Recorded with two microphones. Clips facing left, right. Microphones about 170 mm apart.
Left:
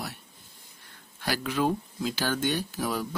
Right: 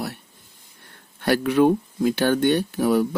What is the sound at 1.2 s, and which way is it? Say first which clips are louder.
Speech: right 10 dB; 60° right (ahead or behind).